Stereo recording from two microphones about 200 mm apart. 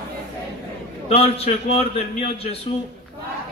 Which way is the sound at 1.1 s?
30° left (ahead or behind).